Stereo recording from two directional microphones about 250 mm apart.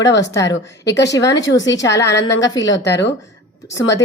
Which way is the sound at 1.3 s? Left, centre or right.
Left.